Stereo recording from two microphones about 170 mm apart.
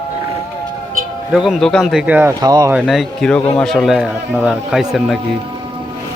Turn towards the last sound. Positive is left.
turn(degrees=0)  # may be behind; listen again after turning